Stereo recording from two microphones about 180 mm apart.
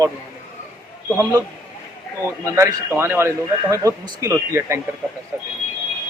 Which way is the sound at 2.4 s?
15° right (ahead or behind).